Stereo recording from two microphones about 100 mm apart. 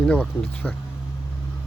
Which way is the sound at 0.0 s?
10° left (ahead or behind).